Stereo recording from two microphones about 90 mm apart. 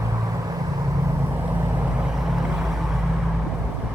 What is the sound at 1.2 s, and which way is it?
Vehicle, 25° right (ahead or behind).